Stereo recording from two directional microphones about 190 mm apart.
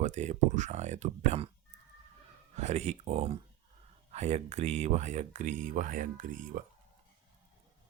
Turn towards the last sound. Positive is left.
turn(degrees=-45)  # may be behind; listen again after turning